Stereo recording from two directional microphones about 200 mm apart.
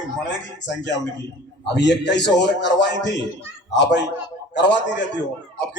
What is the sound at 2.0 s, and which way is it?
A man's voice, 60° left (ahead or behind).